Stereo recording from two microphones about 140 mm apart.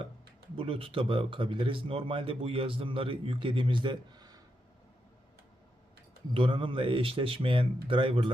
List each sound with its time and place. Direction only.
0.5 s speech: 40° right (ahead or behind)
6.3 s speech: 40° right (ahead or behind)